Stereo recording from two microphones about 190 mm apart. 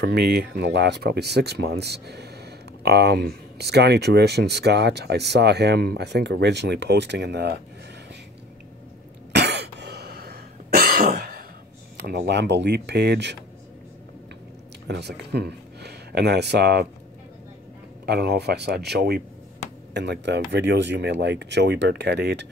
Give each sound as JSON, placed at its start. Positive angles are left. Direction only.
{"t": 0.0, "sound": "speech", "side_deg": -60}
{"t": 9.3, "sound": "cough", "side_deg": -60}
{"t": 12.1, "sound": "speech", "side_deg": -65}
{"t": 14.9, "sound": "speech", "side_deg": -60}
{"t": 18.0, "sound": "speech", "side_deg": -60}